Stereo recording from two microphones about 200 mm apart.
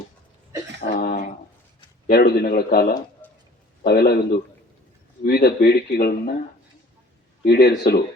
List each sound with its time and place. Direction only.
0.8 s a sound: 45° left (ahead or behind)
2.0 s speech: 50° left (ahead or behind)
7.4 s speech: 50° left (ahead or behind)